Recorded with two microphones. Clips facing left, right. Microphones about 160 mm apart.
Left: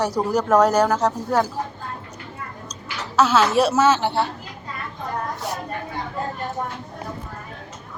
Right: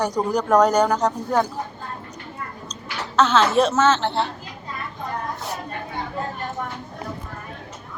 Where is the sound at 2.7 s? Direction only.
10° left (ahead or behind).